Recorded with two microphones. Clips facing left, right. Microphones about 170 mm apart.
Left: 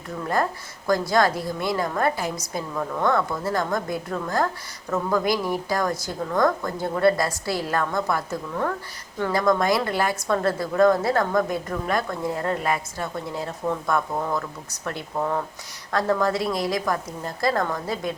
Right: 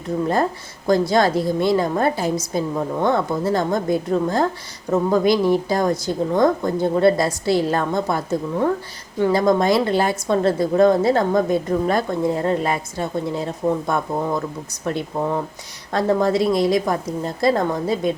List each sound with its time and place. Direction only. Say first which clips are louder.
0.9 s a woman's voice: right 4 dB; 25° right (ahead or behind)